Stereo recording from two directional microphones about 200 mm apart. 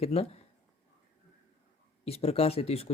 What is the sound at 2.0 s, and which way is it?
Speech, 30° left (ahead or behind).